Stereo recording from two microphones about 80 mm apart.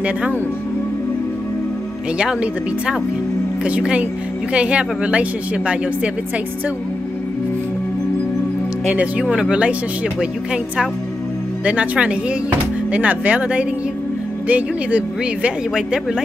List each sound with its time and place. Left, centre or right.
2.1 s speech: centre
8.9 s speech: centre
11.6 s speech: centre